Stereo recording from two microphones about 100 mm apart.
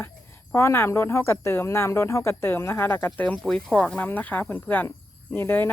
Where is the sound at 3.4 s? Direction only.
5° left (ahead or behind).